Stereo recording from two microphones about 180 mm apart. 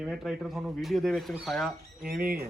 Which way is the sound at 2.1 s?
55° right (ahead or behind).